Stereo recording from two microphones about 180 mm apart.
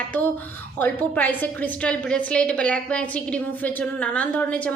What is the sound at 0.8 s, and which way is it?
A woman's voice, 10° left (ahead or behind).